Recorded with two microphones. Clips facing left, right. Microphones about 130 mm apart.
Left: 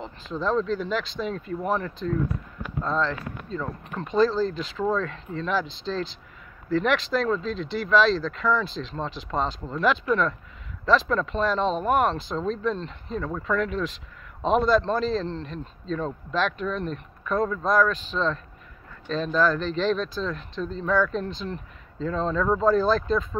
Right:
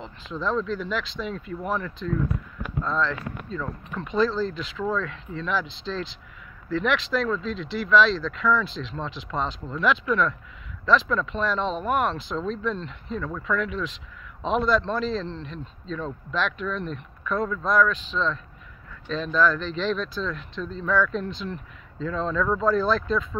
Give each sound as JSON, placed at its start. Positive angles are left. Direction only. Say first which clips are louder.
{"t": 0.0, "sound": "speech", "louder": "left 1 dB", "side_deg": 40}